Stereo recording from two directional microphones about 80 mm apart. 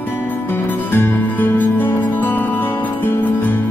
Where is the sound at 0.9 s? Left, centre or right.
Left.